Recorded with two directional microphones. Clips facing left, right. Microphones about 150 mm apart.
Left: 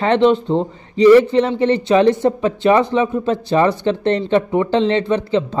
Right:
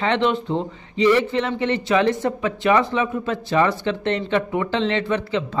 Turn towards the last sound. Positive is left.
turn(degrees=30)  # may be behind; listen again after turning